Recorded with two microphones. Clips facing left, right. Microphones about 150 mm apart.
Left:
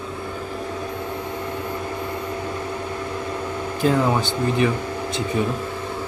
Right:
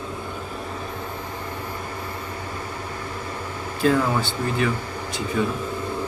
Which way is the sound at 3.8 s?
20° left (ahead or behind).